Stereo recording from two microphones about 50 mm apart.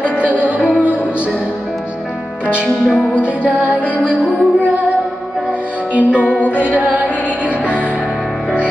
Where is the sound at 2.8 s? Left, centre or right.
Centre.